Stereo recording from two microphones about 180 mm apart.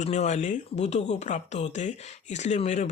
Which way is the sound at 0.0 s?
40° left (ahead or behind).